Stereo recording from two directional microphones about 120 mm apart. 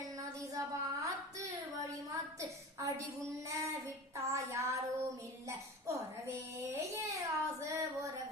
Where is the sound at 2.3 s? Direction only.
25° right (ahead or behind).